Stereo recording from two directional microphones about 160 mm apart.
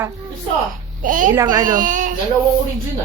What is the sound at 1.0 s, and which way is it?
Speech, 55° right (ahead or behind).